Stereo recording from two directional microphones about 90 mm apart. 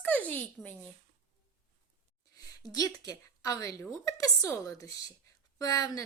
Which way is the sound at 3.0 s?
40° left (ahead or behind).